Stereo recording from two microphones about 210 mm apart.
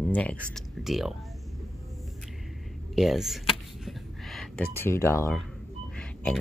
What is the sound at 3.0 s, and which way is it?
Speech, centre (ahead or behind).